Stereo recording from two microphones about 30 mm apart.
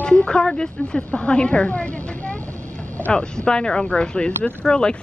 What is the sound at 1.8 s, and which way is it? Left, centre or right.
Vehicle, left.